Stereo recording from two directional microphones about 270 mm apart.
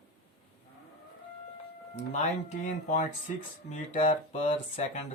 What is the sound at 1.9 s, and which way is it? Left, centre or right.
Speech, left.